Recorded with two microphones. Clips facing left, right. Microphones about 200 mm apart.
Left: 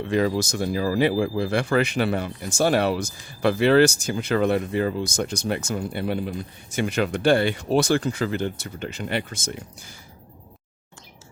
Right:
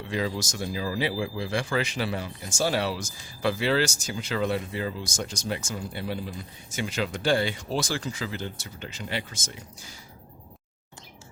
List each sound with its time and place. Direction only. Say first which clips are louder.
0.1 s speech: left 7 dB; 55° left (ahead or behind)